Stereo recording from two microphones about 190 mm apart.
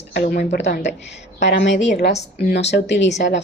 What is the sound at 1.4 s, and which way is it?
Speech, 70° left (ahead or behind).